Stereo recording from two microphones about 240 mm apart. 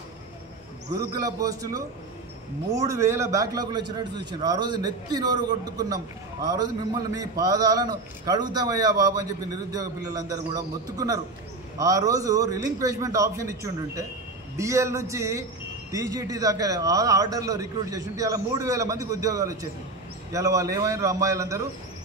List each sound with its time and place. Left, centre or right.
1.2 s a man's voice: centre